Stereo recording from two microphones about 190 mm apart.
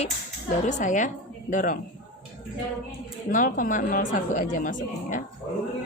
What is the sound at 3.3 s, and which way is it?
Speech, 45° left (ahead or behind).